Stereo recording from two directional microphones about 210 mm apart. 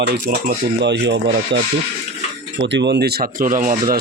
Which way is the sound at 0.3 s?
50° right (ahead or behind).